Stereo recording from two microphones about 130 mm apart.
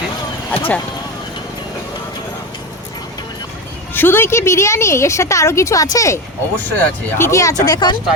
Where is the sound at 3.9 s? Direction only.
15° left (ahead or behind).